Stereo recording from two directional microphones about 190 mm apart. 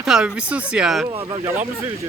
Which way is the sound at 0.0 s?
5° right (ahead or behind).